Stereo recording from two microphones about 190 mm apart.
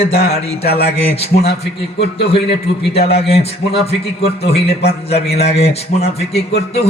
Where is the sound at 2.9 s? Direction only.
30° left (ahead or behind).